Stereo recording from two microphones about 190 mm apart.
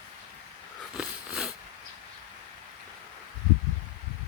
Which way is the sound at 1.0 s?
5° right (ahead or behind).